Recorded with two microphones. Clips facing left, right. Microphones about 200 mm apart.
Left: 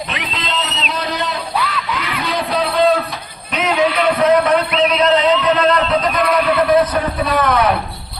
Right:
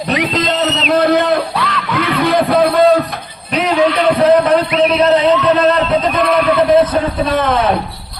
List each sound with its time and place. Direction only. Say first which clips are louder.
0.1 s a sound: right 9 dB; 45° right (ahead or behind)
1.5 s music: right 2 dB; 5° left (ahead or behind)
2.1 s music: right 8 dB; 55° right (ahead or behind)
3.5 s music: right 3 dB; 35° right (ahead or behind)
4.9 s a sound: right 2 dB; 30° right (ahead or behind)
6.6 s a man's voice: right 3 dB; 30° right (ahead or behind)